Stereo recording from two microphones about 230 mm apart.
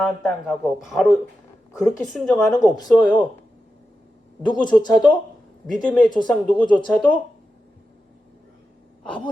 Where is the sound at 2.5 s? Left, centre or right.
Centre.